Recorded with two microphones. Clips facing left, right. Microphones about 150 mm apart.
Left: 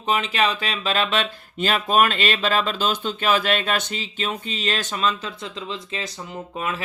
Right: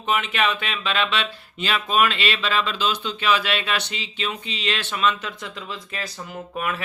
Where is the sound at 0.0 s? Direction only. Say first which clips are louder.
Left 1 dB; 35° left (ahead or behind).